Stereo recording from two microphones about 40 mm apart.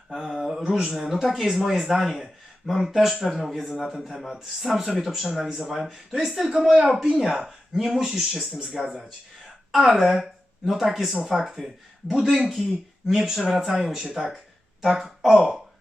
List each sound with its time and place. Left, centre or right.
0.1 s speech: centre
9.7 s speech: centre
15.4 s speech: centre